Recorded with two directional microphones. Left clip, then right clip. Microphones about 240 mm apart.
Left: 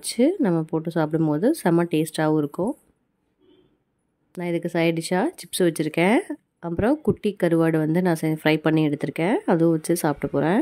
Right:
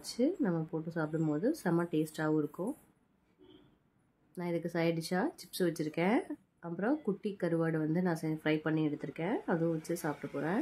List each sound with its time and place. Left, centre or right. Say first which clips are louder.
0.0 s speech: left 12 dB; left
4.3 s speech: left 10 dB; left